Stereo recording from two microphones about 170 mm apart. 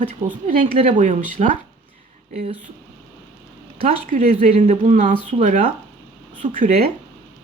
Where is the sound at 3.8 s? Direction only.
50° right (ahead or behind).